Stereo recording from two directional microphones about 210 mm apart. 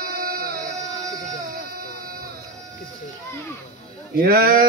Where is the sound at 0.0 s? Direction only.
45° right (ahead or behind).